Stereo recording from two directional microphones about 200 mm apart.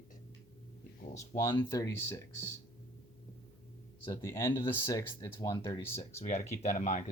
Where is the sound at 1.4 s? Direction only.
15° left (ahead or behind).